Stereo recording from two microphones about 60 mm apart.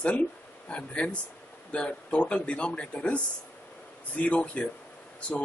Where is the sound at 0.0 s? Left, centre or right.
Left.